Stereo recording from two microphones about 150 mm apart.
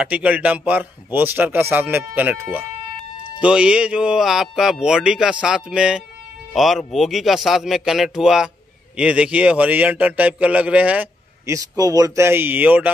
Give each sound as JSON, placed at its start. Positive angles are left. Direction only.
{"t": 0.0, "sound": "a man's voice", "side_deg": -10}
{"t": 11.4, "sound": "a man's voice", "side_deg": -20}